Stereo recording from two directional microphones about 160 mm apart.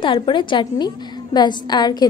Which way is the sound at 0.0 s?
35° left (ahead or behind).